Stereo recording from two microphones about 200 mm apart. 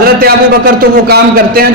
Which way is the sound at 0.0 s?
50° right (ahead or behind).